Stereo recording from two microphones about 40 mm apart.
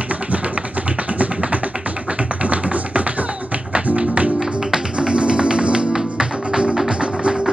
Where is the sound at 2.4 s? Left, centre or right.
Right.